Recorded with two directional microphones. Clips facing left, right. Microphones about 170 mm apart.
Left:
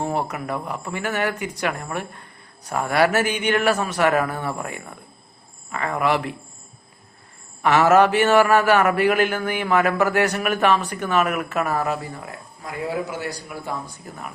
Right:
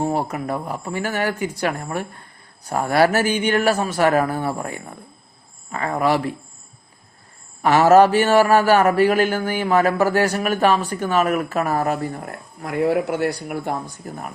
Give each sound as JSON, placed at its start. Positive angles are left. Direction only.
{"t": 0.0, "sound": "a man's voice", "side_deg": -35}
{"t": 7.6, "sound": "a man's voice", "side_deg": -35}